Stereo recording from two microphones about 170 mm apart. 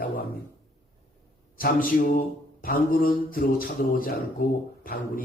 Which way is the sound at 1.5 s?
55° left (ahead or behind).